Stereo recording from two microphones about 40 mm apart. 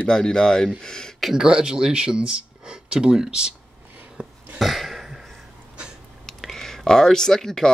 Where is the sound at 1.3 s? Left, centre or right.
Right.